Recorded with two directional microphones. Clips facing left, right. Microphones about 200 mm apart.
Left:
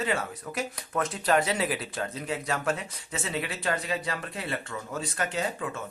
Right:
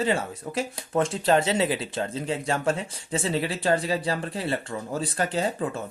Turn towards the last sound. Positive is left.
turn(degrees=-35)  # may be behind; listen again after turning